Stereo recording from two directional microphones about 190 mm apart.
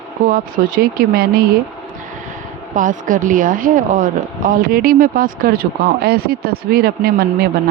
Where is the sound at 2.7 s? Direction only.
45° right (ahead or behind).